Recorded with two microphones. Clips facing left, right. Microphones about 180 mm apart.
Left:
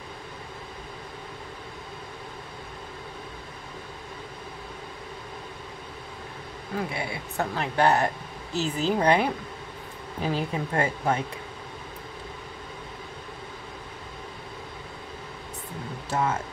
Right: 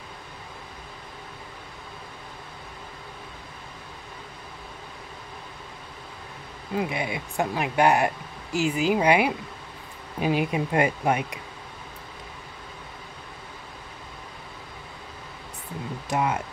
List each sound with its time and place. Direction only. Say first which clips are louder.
6.8 s speech: right 4 dB; 15° right (ahead or behind)
16.1 s speech: right 1 dB; 15° right (ahead or behind)